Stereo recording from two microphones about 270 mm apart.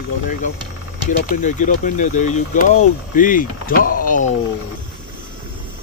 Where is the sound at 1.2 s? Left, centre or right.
Left.